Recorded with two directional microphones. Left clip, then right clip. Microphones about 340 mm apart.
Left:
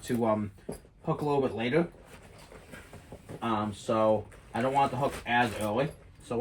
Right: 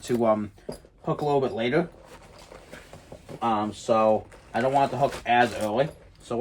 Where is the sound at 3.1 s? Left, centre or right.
Right.